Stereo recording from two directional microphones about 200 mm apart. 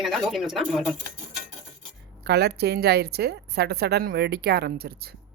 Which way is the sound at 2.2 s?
55° right (ahead or behind).